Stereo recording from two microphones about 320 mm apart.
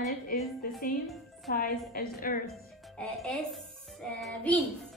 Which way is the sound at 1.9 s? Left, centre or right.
Left.